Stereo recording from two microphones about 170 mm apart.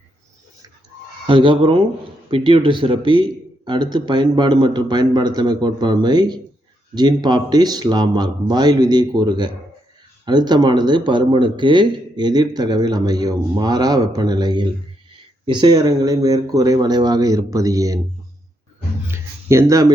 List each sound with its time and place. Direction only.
1.3 s speech: 30° right (ahead or behind)
19.1 s speech: 15° right (ahead or behind)